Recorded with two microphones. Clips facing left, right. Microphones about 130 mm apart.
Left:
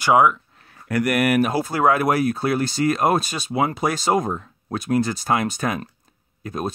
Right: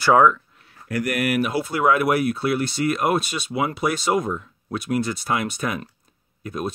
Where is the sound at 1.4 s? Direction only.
45° left (ahead or behind).